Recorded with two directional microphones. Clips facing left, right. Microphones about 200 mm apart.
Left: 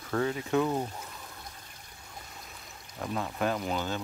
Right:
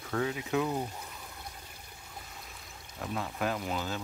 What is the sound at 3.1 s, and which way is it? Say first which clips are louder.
Speech: left 3 dB; centre (ahead or behind).